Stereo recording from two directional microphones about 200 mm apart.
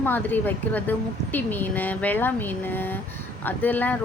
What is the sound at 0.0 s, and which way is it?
A woman's voice, 10° left (ahead or behind).